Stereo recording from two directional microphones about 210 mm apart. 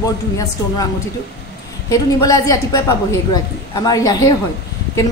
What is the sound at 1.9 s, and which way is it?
A woman's voice, 15° left (ahead or behind).